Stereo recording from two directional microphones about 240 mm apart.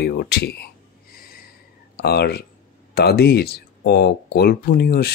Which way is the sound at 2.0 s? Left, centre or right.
Left.